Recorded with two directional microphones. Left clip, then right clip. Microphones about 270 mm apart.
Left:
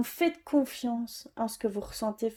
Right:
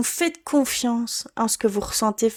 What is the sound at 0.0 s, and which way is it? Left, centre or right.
Speech, right.